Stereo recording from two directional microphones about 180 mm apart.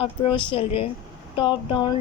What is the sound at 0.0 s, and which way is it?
A woman's voice, 30° left (ahead or behind).